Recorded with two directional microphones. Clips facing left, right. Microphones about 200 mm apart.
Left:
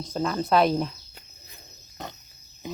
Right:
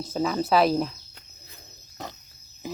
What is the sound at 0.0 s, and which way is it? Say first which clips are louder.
Speech: right 1 dB; 5° right (ahead or behind).